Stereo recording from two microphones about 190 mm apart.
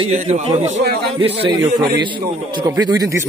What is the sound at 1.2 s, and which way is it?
A man's voice, 25° right (ahead or behind).